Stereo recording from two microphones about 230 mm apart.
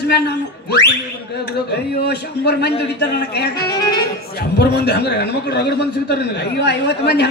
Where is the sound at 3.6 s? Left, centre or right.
Centre.